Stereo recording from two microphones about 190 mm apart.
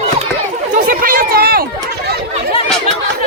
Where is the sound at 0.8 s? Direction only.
50° right (ahead or behind).